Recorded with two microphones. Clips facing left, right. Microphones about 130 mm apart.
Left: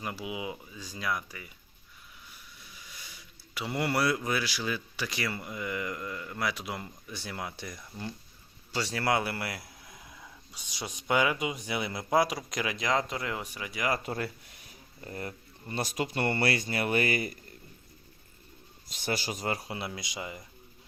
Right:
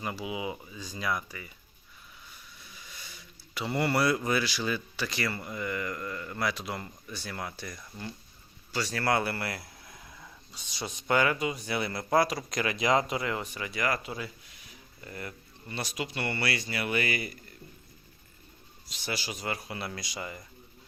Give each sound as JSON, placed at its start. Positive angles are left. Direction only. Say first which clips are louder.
{"t": 0.0, "sound": "speech", "louder": "right 2 dB", "side_deg": 0}
{"t": 2.9, "sound": "a man's voice", "louder": "right 1 dB", "side_deg": 10}
{"t": 12.8, "sound": "speech", "louder": "right 4 dB", "side_deg": -10}
{"t": 14.0, "sound": "speech", "louder": "left 4 dB", "side_deg": 55}
{"t": 15.0, "sound": "speech", "louder": "left 2 dB", "side_deg": 30}
{"t": 15.8, "sound": "speech", "louder": "left 4 dB", "side_deg": 45}
{"t": 18.9, "sound": "speech", "louder": "left 3 dB", "side_deg": 50}
{"t": 19.7, "sound": "speech", "louder": "even", "side_deg": 15}